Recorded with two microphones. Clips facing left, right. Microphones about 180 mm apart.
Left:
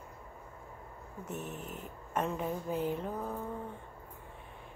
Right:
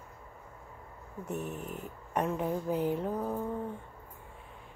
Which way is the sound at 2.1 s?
15° right (ahead or behind).